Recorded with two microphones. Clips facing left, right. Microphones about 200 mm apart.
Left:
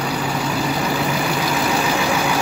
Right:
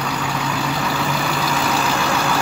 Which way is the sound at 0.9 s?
15° left (ahead or behind).